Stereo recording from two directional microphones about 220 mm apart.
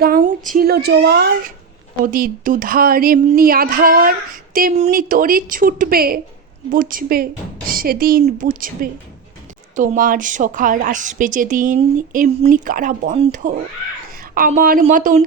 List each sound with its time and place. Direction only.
0.0 s speech: 40° right (ahead or behind)